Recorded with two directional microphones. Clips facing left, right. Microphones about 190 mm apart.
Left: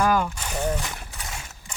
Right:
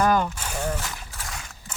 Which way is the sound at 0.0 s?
5° left (ahead or behind).